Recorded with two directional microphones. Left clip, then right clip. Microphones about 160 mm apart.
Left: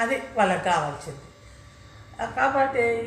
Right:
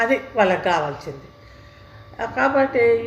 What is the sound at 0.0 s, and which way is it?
A woman's voice, 50° right (ahead or behind).